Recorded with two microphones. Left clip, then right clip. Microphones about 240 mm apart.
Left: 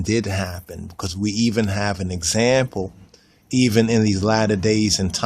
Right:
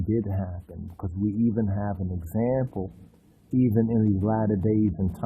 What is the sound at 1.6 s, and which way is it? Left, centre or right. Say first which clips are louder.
Speech: left 8 dB; left.